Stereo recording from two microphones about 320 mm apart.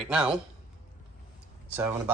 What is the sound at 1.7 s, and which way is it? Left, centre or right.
Speech, centre.